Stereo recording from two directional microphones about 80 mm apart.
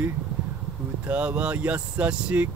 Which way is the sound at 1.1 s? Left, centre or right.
Centre.